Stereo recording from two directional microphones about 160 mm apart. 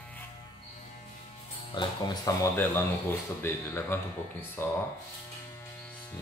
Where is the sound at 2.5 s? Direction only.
15° left (ahead or behind).